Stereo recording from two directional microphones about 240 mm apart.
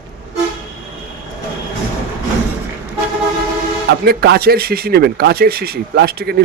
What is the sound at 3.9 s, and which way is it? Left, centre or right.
Speech, right.